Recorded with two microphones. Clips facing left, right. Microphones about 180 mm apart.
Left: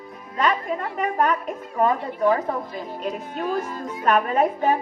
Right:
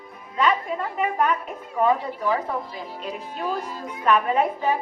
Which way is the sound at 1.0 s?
45° left (ahead or behind).